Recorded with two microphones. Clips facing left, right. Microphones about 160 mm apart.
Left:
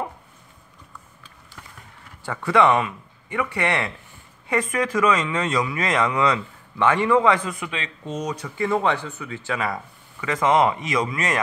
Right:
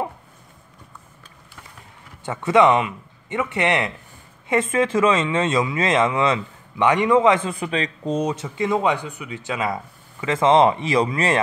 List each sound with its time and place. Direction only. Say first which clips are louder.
2.2 s speech: right 3 dB; 20° right (ahead or behind)